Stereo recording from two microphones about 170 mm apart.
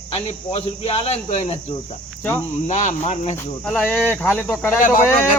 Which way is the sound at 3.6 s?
5° left (ahead or behind).